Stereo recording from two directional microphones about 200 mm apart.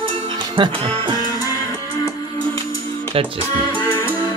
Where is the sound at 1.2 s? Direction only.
20° left (ahead or behind).